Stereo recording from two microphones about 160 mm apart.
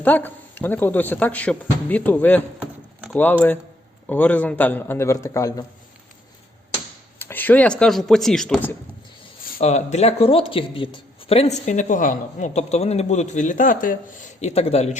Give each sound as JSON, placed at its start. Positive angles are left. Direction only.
{"t": 0.0, "sound": "speech", "side_deg": 10}
{"t": 7.2, "sound": "speech", "side_deg": 15}
{"t": 9.6, "sound": "speech", "side_deg": 45}